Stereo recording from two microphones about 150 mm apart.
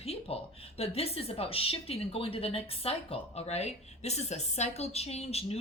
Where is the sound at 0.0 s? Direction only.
40° left (ahead or behind).